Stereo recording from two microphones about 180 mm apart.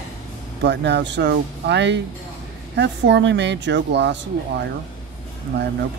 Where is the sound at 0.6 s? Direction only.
75° right (ahead or behind).